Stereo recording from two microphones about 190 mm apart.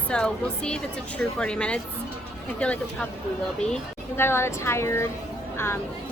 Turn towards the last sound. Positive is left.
turn(degrees=10)  # may be behind; listen again after turning